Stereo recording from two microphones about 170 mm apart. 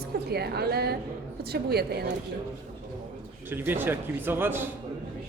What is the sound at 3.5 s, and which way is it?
Speech, 10° right (ahead or behind).